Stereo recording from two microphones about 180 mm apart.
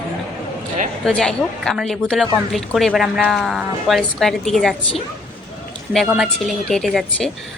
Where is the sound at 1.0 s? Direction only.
5° left (ahead or behind).